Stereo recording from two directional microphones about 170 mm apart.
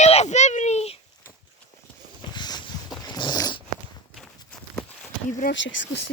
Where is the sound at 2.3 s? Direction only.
25° left (ahead or behind).